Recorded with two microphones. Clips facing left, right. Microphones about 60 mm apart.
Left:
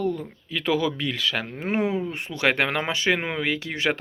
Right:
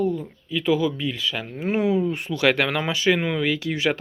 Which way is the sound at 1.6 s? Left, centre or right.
Left.